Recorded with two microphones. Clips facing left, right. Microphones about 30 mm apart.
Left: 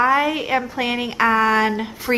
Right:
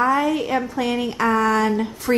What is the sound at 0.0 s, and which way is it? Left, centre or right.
A woman's voice, left.